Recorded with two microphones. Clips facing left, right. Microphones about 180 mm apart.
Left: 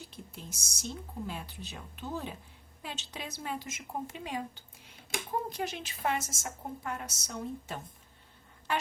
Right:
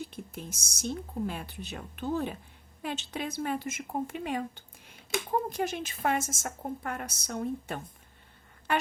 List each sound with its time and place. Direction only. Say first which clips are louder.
0.1 s speech: right 5 dB; 55° right (ahead or behind)
5.5 s a woman's voice: right 5 dB; 50° right (ahead or behind)